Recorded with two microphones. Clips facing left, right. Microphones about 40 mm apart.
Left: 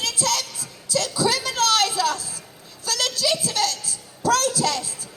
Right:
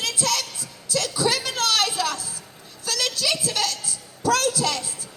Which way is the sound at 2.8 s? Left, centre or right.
Right.